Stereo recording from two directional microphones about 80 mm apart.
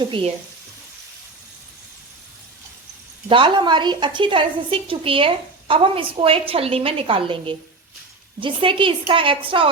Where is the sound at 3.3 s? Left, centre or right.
Right.